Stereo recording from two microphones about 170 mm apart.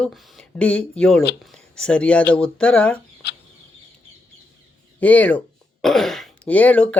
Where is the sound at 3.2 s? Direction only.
70° left (ahead or behind).